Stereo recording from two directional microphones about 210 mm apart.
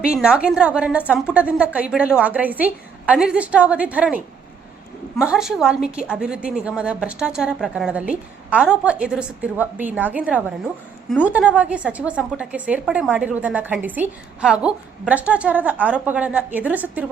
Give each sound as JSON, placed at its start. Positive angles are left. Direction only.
{"t": 0.1, "sound": "a woman's voice", "side_deg": -5}